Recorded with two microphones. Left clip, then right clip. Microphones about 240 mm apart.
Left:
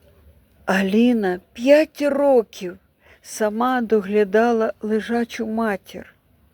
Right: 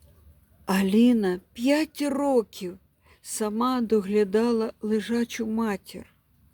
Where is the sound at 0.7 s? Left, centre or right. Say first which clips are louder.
Left 4 dB; centre.